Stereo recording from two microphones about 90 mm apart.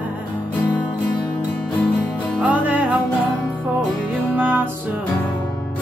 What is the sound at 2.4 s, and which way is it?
Music, 15° right (ahead or behind).